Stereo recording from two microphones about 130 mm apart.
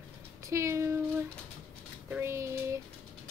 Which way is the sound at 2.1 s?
20° right (ahead or behind).